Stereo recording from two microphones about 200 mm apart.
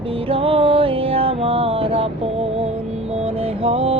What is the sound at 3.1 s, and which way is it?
Music, 30° right (ahead or behind).